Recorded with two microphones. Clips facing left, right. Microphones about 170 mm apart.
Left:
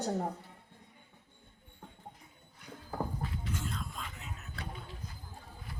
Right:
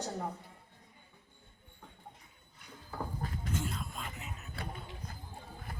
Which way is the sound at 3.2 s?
45° right (ahead or behind).